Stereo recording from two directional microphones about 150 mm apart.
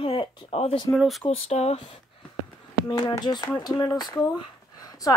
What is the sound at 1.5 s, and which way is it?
Speech, 45° left (ahead or behind).